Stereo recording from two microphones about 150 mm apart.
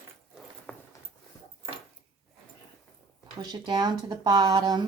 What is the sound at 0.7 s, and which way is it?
Clip-clop, 5° left (ahead or behind).